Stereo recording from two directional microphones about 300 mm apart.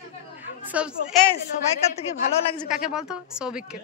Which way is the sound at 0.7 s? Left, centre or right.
Centre.